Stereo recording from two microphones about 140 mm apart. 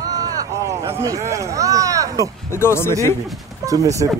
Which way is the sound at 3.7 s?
25° right (ahead or behind).